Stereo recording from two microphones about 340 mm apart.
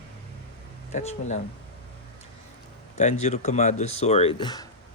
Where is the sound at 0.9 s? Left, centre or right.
Centre.